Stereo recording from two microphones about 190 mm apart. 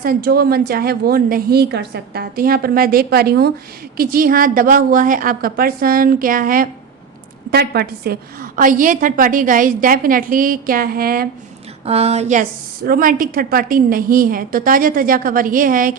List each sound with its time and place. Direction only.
0.0 s a woman's voice: 50° right (ahead or behind)
11.9 s a woman's voice: 35° right (ahead or behind)